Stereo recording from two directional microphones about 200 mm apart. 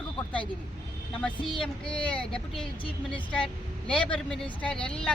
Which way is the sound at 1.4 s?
25° left (ahead or behind).